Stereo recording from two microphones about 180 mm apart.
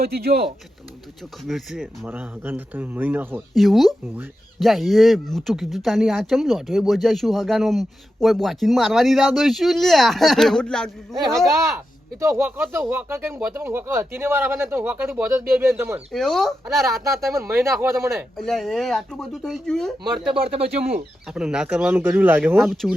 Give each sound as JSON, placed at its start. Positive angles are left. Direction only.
{"t": 0.0, "sound": "speech", "side_deg": -60}
{"t": 1.5, "sound": "speech", "side_deg": 0}
{"t": 12.2, "sound": "speech", "side_deg": -15}
{"t": 16.1, "sound": "speech", "side_deg": 0}
{"t": 17.5, "sound": "speech", "side_deg": -15}
{"t": 18.3, "sound": "speech", "side_deg": 0}
{"t": 20.3, "sound": "speech", "side_deg": -30}
{"t": 21.2, "sound": "speech", "side_deg": -5}